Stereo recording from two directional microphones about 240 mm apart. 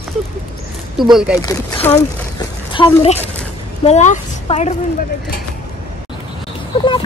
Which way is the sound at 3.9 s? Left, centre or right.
Left.